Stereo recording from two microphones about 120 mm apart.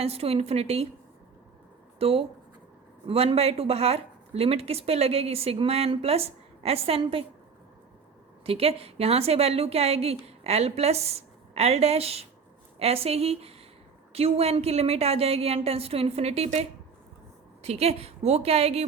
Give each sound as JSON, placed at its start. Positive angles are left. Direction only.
{"t": 0.0, "sound": "a woman's voice", "side_deg": -55}
{"t": 2.0, "sound": "a woman's voice", "side_deg": -55}
{"t": 8.4, "sound": "a woman's voice", "side_deg": -55}